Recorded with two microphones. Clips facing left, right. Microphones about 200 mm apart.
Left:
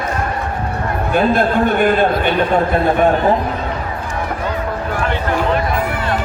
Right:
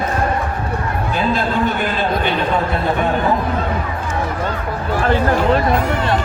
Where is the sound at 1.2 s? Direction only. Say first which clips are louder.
Left 5 dB; 55° left (ahead or behind).